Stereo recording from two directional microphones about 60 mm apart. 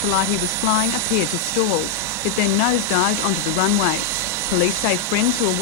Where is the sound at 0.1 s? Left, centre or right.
Right.